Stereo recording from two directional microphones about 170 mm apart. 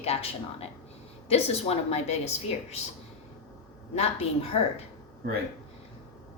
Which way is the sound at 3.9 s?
35° left (ahead or behind).